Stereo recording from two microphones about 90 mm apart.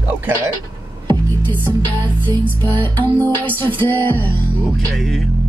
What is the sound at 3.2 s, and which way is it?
Music, 20° left (ahead or behind).